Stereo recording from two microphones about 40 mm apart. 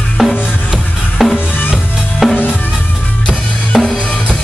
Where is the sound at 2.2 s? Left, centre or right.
Centre.